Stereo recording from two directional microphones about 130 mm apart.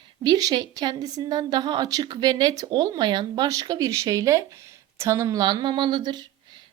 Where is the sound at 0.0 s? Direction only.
30° right (ahead or behind).